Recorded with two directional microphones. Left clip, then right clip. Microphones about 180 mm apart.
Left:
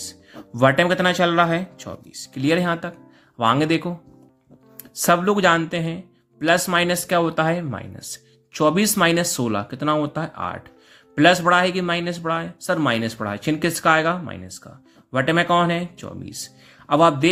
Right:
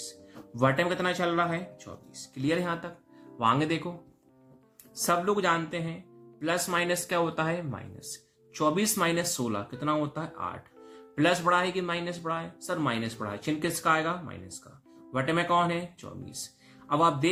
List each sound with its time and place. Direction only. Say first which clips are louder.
0.5 s speech: left 9 dB; 45° left (ahead or behind)
5.0 s speech: left 9 dB; 45° left (ahead or behind)
16.8 s music: left 9 dB; 45° left (ahead or behind)